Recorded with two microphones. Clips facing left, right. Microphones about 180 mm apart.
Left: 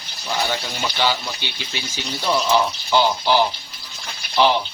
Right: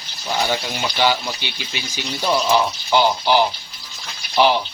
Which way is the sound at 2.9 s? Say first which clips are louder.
Right 1 dB; 15° right (ahead or behind).